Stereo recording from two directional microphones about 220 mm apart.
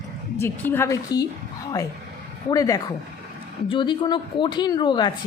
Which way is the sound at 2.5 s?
15° left (ahead or behind).